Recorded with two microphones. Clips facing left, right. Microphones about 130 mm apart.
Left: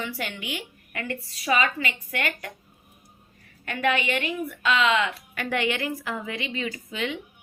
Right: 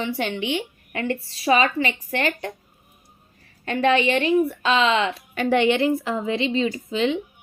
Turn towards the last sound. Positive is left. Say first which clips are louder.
# right 8 dB
turn(degrees=-25)  # may be behind; listen again after turning